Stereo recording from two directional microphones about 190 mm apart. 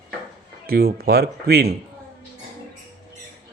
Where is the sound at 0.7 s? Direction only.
55° right (ahead or behind).